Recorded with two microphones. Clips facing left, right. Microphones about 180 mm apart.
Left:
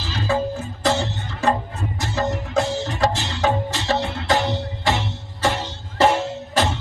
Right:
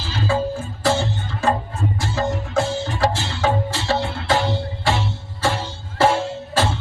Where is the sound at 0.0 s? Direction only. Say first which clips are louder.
Right 1 dB; 20° left (ahead or behind).